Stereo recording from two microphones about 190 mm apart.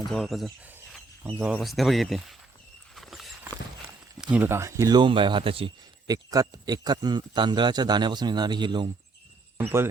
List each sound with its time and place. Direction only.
0.1 s speech: centre (ahead or behind)
2.9 s walk: centre (ahead or behind)
4.2 s speech: 5° right (ahead or behind); by 8.9 s 25° right (ahead or behind)